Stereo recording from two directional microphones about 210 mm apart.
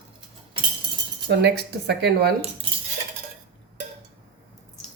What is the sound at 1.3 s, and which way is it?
Speech, 55° right (ahead or behind).